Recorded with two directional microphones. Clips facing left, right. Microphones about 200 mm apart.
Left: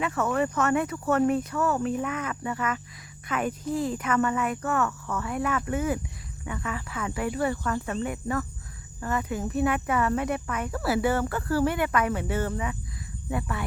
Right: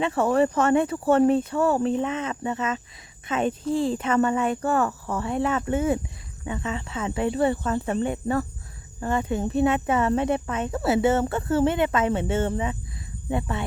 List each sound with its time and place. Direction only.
0.0 s speech: 30° right (ahead or behind)